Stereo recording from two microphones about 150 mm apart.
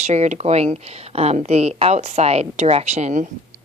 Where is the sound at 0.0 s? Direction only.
50° right (ahead or behind).